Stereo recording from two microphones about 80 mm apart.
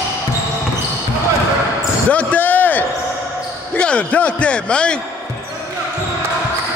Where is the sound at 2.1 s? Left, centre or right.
Left.